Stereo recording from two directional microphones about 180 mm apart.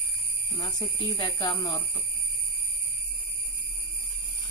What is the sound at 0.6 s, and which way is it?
Speech, 20° left (ahead or behind).